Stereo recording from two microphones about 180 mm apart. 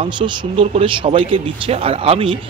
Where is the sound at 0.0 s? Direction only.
30° right (ahead or behind).